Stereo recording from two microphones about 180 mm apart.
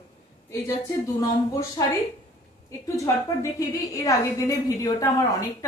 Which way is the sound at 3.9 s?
20° left (ahead or behind).